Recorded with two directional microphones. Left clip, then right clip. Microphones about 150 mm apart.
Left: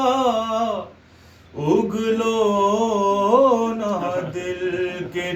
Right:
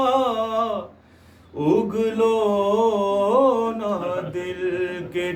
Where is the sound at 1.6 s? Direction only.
10° right (ahead or behind).